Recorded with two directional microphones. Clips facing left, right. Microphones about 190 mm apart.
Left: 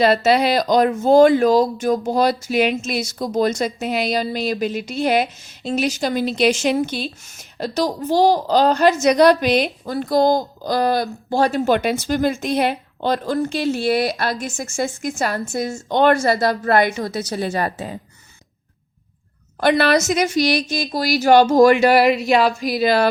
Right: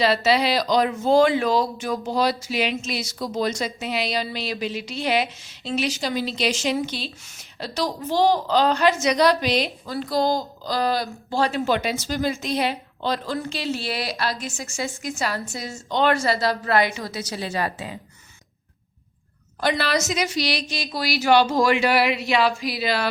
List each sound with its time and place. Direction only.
0.0 s speech: 50° left (ahead or behind)
19.5 s speech: 60° left (ahead or behind)